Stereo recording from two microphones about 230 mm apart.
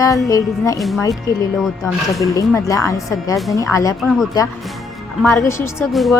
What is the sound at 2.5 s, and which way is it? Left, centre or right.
Speech, centre.